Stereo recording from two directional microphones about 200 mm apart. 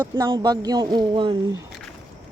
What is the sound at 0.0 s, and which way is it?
Speech, 20° right (ahead or behind).